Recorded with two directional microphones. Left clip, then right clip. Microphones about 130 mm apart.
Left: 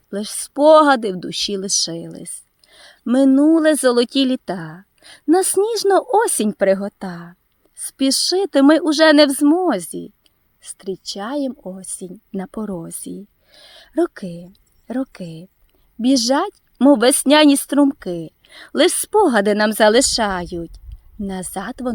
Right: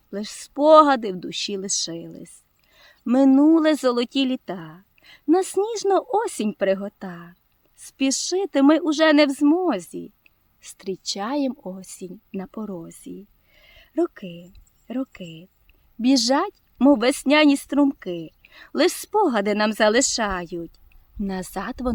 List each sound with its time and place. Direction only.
0.1 s a woman's voice: 35° left (ahead or behind)
3.2 s speech: 20° left (ahead or behind)
3.9 s a woman's voice: 40° left (ahead or behind)
10.6 s speech: 15° left (ahead or behind)
12.4 s a woman's voice: 40° left (ahead or behind)
16.0 s speech: 25° left (ahead or behind)
17.0 s a woman's voice: 45° left (ahead or behind)
21.2 s speech: 15° left (ahead or behind)